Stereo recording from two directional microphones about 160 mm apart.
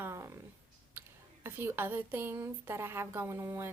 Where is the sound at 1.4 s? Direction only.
15° right (ahead or behind).